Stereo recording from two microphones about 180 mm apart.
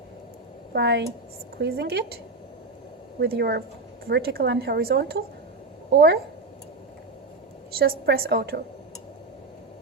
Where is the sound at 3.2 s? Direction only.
65° right (ahead or behind).